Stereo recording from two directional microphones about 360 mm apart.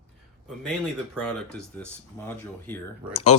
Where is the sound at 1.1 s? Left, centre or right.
Centre.